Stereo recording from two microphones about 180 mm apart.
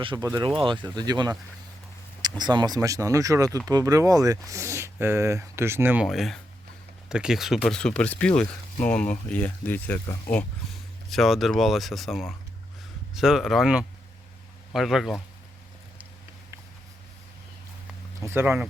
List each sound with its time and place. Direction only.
0.0 s speech: 25° right (ahead or behind)
2.4 s speech: 25° right (ahead or behind); by 10.4 s 15° left (ahead or behind)
11.1 s speech: centre (ahead or behind)
18.3 s speech: 15° right (ahead or behind)